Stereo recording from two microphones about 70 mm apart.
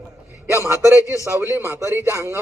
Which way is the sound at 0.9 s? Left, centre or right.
Left.